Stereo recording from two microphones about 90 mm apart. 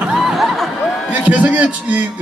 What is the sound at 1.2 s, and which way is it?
Speech, 15° right (ahead or behind).